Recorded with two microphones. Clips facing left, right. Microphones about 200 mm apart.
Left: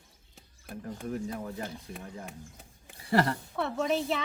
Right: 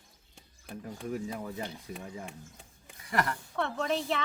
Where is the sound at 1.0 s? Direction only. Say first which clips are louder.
Even; 5° right (ahead or behind).